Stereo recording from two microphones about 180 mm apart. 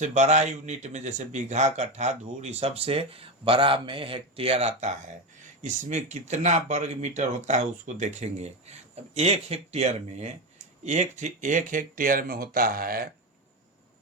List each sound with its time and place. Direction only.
0.0 s a man's voice: 40° right (ahead or behind)